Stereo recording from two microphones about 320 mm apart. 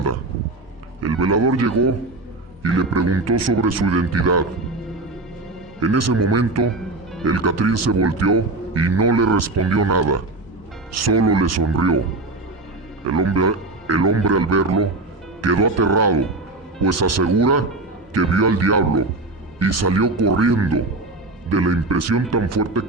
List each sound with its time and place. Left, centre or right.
1.0 s a man's voice: right
5.8 s a man's voice: right
13.1 s a man's voice: right